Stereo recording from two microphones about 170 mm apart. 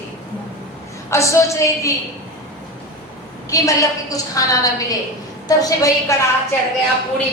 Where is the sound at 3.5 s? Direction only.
20° left (ahead or behind).